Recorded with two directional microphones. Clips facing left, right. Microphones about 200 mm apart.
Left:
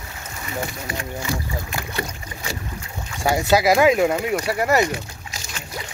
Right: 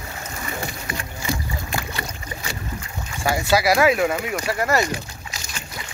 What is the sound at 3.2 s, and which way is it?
Speech, 15° left (ahead or behind).